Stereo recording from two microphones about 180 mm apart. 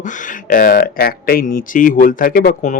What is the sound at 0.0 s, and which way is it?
Speech, 45° left (ahead or behind).